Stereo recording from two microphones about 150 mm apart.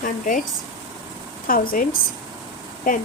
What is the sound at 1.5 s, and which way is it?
Speech, 70° left (ahead or behind).